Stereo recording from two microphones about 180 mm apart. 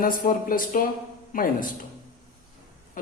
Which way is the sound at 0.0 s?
50° left (ahead or behind).